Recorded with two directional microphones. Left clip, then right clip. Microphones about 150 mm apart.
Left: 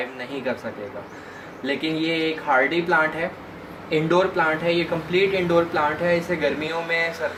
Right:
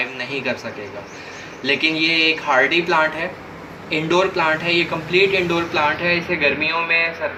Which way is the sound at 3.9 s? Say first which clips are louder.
Right 2 dB; 55° left (ahead or behind).